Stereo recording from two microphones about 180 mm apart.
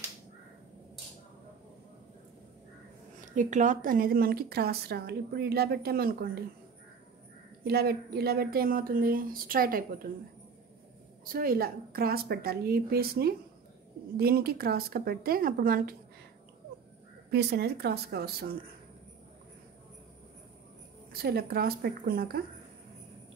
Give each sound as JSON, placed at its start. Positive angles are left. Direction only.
{"t": 3.2, "sound": "speech", "side_deg": -45}
{"t": 7.6, "sound": "a woman's voice", "side_deg": -60}
{"t": 11.3, "sound": "speech", "side_deg": -55}
{"t": 17.3, "sound": "speech", "side_deg": -65}
{"t": 21.1, "sound": "speech", "side_deg": -60}